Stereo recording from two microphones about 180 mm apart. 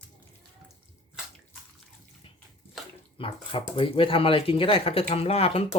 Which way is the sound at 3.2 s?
30° left (ahead or behind).